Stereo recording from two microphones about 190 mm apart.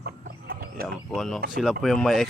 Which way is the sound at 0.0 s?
50° right (ahead or behind).